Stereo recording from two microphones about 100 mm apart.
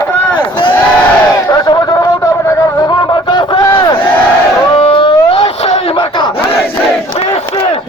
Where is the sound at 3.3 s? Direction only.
55° left (ahead or behind).